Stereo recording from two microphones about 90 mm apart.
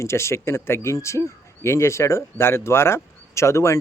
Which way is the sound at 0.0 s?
30° left (ahead or behind).